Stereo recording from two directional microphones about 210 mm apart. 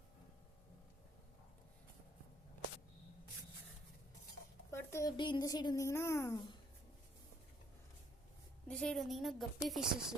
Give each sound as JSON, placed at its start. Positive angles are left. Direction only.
{"t": 4.7, "sound": "speech", "side_deg": 15}
{"t": 8.6, "sound": "a woman's voice", "side_deg": 5}